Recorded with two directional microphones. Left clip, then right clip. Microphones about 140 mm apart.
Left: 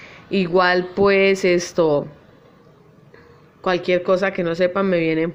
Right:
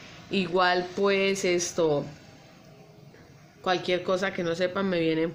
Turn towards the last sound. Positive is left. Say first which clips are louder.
# left 7 dB
turn(degrees=30)  # may be behind; listen again after turning